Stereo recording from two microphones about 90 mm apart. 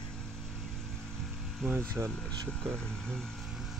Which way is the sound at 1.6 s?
25° right (ahead or behind).